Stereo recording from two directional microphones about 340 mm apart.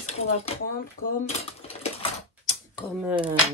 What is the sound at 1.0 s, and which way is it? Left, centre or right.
Cutlery, centre.